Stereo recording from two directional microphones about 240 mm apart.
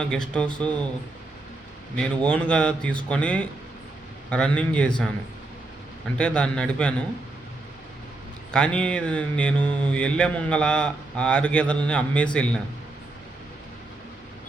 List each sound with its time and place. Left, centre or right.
0.0 s speech: centre
2.0 s speech: centre
6.1 s speech: centre
8.5 s speech: centre